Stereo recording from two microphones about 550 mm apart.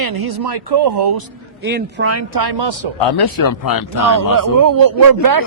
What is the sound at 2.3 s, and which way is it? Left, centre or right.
Speech, right.